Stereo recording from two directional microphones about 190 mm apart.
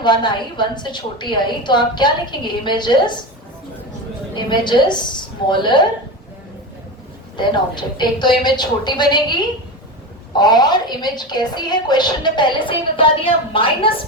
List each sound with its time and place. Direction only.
0.0 s a woman's voice: 25° left (ahead or behind)
4.4 s a woman's voice: 25° left (ahead or behind)
7.3 s a woman's voice: 25° left (ahead or behind)
10.3 s a woman's voice: 20° left (ahead or behind)